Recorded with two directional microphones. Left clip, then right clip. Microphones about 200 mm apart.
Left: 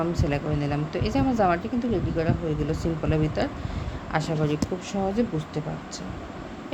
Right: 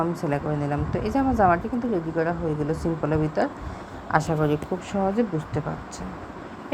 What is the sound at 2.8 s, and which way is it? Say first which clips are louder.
A woman's voice: right 1 dB; 10° right (ahead or behind).